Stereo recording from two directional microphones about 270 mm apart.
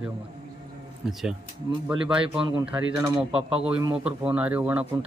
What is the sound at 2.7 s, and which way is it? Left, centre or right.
Speech, centre.